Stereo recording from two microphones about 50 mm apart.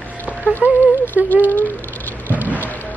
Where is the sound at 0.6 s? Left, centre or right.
Left.